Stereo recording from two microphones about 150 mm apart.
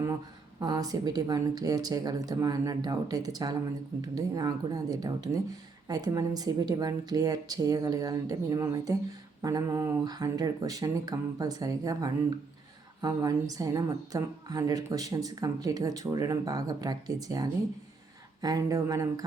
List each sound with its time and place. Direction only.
0.6 s a woman's voice: 25° right (ahead or behind)